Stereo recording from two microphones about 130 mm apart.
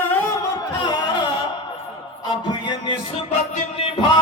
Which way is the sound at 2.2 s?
35° left (ahead or behind).